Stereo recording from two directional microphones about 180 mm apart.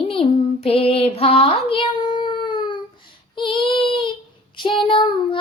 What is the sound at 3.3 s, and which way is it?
Child singing, 30° left (ahead or behind).